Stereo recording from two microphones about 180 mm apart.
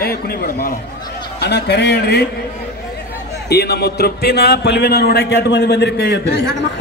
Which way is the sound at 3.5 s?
65° left (ahead or behind).